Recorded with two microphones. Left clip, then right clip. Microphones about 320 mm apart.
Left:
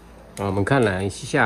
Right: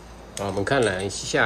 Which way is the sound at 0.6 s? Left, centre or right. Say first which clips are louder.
Left 1 dB; centre.